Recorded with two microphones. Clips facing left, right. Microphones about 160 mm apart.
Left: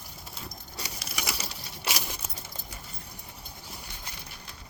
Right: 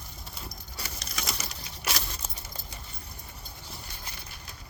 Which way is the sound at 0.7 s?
10° left (ahead or behind).